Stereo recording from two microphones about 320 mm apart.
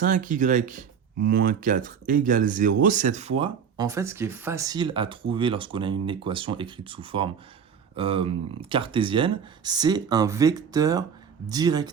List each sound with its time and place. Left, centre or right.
0.0 s speech: right